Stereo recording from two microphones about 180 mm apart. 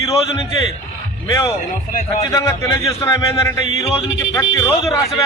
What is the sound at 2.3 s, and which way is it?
A man's voice, 15° left (ahead or behind).